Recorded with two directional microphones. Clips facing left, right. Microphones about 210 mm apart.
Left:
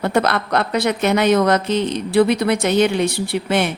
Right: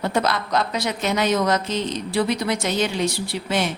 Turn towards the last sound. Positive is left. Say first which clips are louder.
# left 5 dB
turn(degrees=60)  # may be behind; listen again after turning